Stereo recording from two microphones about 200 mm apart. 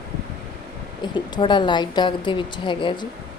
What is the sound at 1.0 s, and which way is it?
Speech, 25° left (ahead or behind).